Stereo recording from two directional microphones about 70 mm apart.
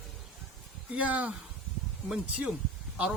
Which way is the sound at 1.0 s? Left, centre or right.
Right.